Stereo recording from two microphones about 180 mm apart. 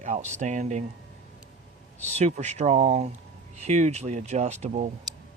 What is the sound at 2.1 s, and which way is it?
Speech, 40° right (ahead or behind).